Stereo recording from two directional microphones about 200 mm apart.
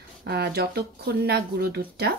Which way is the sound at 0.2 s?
55° right (ahead or behind).